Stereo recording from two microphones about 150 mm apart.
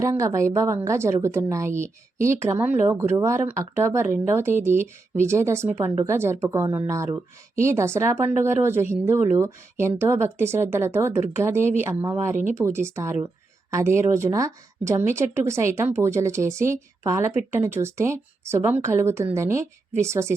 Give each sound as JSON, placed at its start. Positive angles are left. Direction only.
{"t": 0.0, "sound": "a woman's voice", "side_deg": -20}